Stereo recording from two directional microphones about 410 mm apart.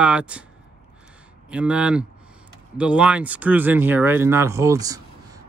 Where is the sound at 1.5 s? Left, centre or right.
Centre.